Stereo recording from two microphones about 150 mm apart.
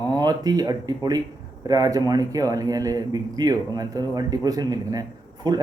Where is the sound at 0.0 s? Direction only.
25° right (ahead or behind).